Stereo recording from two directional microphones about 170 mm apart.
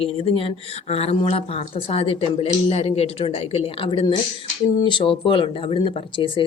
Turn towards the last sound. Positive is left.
turn(degrees=30)  # may be behind; listen again after turning